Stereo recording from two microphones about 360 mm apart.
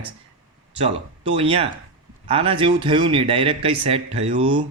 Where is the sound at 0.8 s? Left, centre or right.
Centre.